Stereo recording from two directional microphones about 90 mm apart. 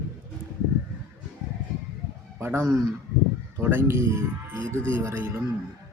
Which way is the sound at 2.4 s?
25° right (ahead or behind).